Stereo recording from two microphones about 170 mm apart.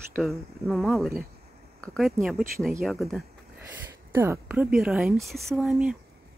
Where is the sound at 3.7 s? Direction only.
15° right (ahead or behind).